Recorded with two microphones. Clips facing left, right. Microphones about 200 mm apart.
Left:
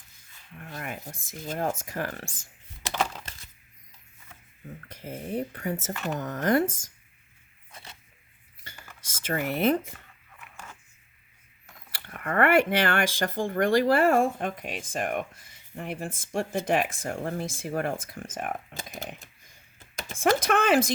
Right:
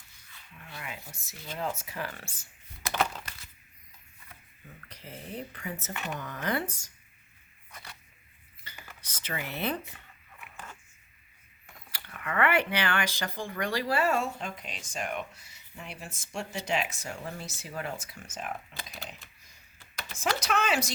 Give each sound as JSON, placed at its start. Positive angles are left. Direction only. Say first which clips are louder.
{"t": 0.5, "sound": "rub", "louder": "left 6 dB", "side_deg": 45}
{"t": 1.3, "sound": "speech", "louder": "left 5 dB", "side_deg": 50}
{"t": 2.9, "sound": "a sound", "louder": "even", "side_deg": 10}
{"t": 4.9, "sound": "speech", "louder": "left 8 dB", "side_deg": 45}
{"t": 7.7, "sound": "a sound", "louder": "left 1 dB", "side_deg": 25}
{"t": 9.2, "sound": "speech", "louder": "left 9 dB", "side_deg": 50}
{"t": 11.9, "sound": "speech", "louder": "left 5 dB", "side_deg": 45}